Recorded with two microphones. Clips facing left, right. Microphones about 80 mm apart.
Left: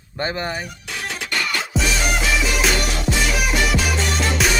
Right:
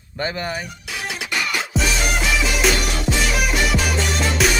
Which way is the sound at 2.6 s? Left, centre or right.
Centre.